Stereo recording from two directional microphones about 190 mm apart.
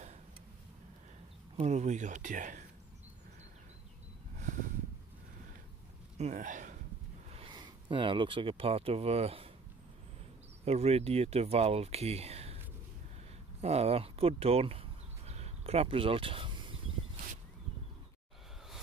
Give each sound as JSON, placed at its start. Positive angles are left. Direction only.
{"t": 1.6, "sound": "speech", "side_deg": -35}
{"t": 6.1, "sound": "speech", "side_deg": -40}
{"t": 7.3, "sound": "speech", "side_deg": -25}
{"t": 10.6, "sound": "speech", "side_deg": -35}
{"t": 13.6, "sound": "a sound", "side_deg": -35}